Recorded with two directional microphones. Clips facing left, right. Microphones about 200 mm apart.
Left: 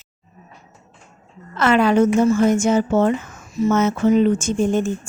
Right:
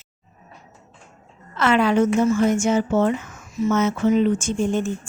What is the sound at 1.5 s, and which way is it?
A woman's voice, 45° left (ahead or behind).